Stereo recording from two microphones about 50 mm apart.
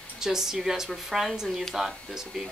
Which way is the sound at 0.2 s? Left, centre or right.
Centre.